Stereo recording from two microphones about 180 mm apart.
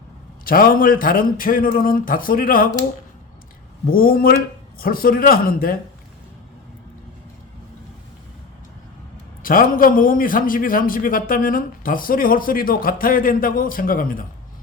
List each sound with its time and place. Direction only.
0.4 s a man's voice: 55° left (ahead or behind)
3.8 s a man's voice: 55° left (ahead or behind)
9.4 s a man's voice: 50° left (ahead or behind)